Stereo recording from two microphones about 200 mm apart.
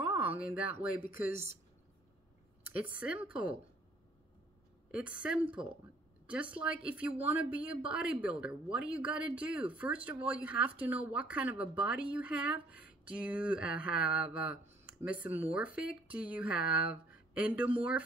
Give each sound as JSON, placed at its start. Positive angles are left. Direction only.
{"t": 0.0, "sound": "a sound", "side_deg": -10}
{"t": 1.1, "sound": "speech", "side_deg": -10}
{"t": 2.9, "sound": "speech", "side_deg": -5}
{"t": 4.9, "sound": "speech", "side_deg": -5}